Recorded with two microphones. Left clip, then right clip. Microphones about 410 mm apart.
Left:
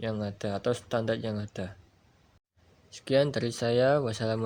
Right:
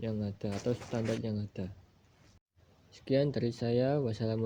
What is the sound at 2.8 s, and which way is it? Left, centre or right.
Speech, centre.